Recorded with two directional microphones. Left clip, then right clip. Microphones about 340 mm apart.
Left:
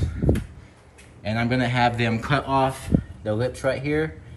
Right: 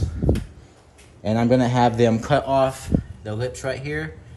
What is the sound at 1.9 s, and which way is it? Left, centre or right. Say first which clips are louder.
Speech: right 5 dB; centre.